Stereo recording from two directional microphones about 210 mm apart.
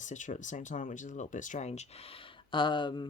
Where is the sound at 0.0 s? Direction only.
35° left (ahead or behind).